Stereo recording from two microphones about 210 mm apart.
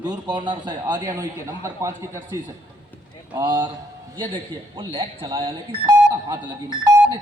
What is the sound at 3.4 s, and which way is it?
Speech, 20° right (ahead or behind).